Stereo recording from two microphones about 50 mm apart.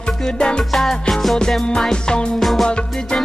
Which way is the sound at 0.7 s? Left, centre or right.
Centre.